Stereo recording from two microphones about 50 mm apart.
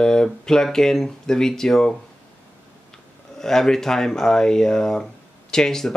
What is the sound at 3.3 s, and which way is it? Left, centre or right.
Speech, centre.